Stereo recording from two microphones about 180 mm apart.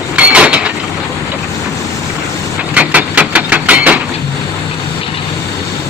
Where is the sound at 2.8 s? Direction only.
10° right (ahead or behind).